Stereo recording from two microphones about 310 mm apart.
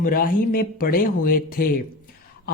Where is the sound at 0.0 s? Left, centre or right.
Left.